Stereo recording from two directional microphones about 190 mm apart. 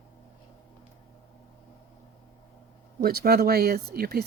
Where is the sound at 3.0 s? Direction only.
55° right (ahead or behind).